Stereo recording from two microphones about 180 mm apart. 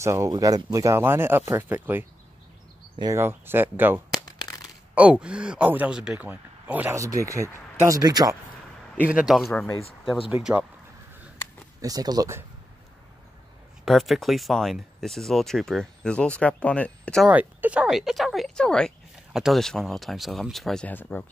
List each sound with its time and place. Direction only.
0.0 s speech: 15° right (ahead or behind)
9.1 s speech: centre (ahead or behind)
11.8 s speech: 20° right (ahead or behind)
13.8 s speech: centre (ahead or behind)
17.3 s speech: 10° right (ahead or behind); by 21.3 s 10° left (ahead or behind)